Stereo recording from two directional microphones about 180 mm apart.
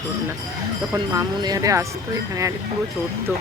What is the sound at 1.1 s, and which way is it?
Speech, 20° right (ahead or behind).